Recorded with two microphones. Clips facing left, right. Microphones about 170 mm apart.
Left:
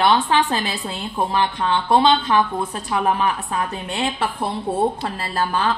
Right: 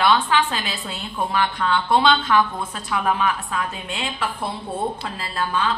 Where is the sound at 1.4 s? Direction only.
25° left (ahead or behind).